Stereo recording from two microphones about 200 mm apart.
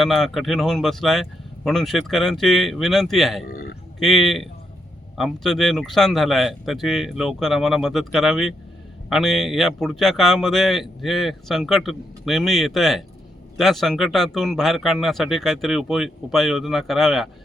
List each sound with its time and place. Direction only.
0.0 s speech: centre (ahead or behind)
3.4 s speech: 50° left (ahead or behind)
4.0 s speech: centre (ahead or behind)